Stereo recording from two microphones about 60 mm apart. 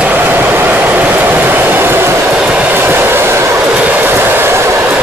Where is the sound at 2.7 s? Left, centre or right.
Right.